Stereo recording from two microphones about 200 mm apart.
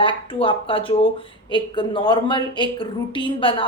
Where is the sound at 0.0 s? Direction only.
25° left (ahead or behind).